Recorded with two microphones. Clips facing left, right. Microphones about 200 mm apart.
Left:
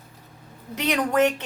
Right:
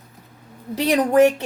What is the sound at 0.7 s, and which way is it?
Speech, 35° right (ahead or behind).